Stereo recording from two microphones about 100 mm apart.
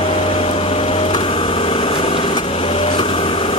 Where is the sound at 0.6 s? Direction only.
75° left (ahead or behind).